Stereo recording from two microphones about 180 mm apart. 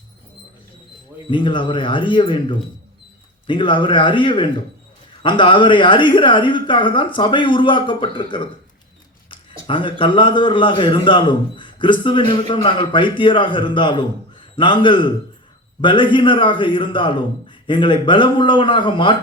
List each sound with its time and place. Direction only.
1.3 s a man's voice: 25° left (ahead or behind)
9.6 s a man's voice: 25° left (ahead or behind)